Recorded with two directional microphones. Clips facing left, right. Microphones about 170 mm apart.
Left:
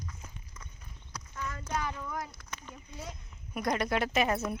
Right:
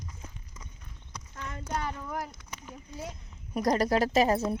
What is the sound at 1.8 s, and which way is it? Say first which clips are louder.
Speech: right 2 dB; 30° right (ahead or behind).